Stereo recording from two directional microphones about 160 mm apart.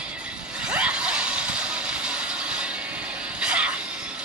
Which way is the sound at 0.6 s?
5° right (ahead or behind).